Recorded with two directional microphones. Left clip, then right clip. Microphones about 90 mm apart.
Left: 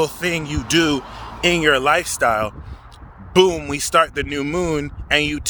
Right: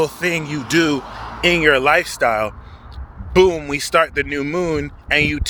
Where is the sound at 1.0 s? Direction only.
25° right (ahead or behind).